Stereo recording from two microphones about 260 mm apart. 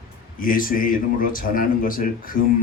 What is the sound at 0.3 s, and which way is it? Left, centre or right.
A man's voice, left.